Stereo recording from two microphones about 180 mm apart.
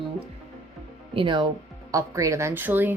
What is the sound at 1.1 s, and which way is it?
A woman's voice, 25° right (ahead or behind).